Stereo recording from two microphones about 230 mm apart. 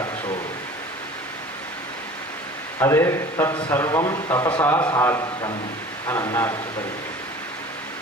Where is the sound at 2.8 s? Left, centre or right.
Centre.